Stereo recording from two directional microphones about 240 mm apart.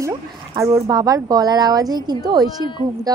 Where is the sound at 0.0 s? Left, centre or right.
Centre.